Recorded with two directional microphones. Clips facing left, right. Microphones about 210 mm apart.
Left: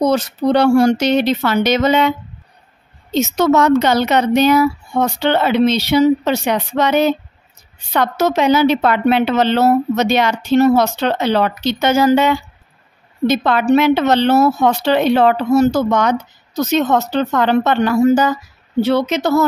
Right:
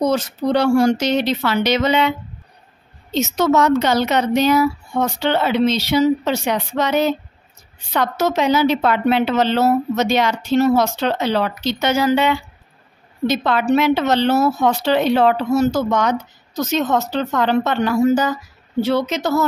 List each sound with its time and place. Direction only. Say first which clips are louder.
0.0 s speech: left 3 dB; 65° left (ahead or behind); by 12.4 s 45° left (ahead or behind)
13.3 s speech: left 3 dB; 55° left (ahead or behind)